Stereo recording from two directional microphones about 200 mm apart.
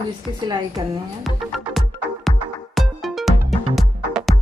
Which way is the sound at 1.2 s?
Centre (ahead or behind).